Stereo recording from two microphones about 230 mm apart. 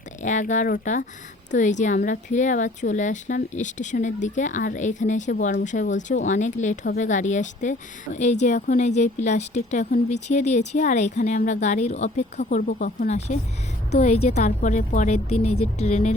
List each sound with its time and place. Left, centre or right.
0.2 s a woman's voice: left